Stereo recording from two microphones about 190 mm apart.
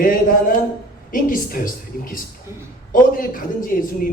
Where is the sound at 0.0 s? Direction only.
45° left (ahead or behind).